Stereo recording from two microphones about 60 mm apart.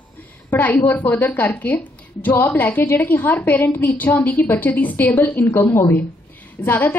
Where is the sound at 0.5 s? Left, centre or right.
Left.